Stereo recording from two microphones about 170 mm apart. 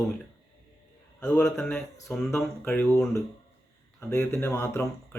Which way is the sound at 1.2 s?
5° left (ahead or behind).